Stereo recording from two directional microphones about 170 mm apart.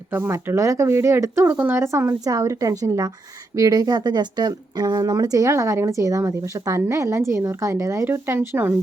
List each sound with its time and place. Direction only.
0.1 s speech: 15° right (ahead or behind)